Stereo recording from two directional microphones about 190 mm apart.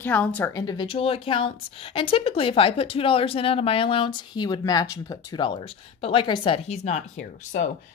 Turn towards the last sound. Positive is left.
turn(degrees=40)  # may be behind; listen again after turning